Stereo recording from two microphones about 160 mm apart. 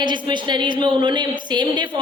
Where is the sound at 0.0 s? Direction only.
30° right (ahead or behind).